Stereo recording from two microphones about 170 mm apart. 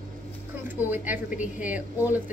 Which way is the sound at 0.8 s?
10° right (ahead or behind).